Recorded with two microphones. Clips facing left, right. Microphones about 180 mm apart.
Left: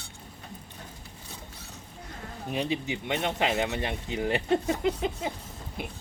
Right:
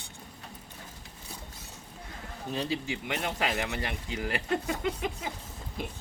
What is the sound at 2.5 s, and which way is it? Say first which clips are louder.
Speech: left 2 dB; 20° left (ahead or behind).